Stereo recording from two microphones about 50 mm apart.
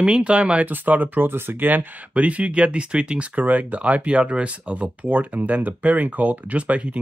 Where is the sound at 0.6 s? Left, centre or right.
Right.